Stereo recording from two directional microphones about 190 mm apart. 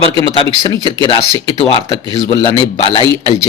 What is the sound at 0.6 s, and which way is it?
Speech, 20° left (ahead or behind).